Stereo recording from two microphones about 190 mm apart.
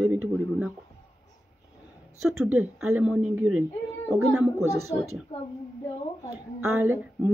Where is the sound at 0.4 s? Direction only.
10° right (ahead or behind).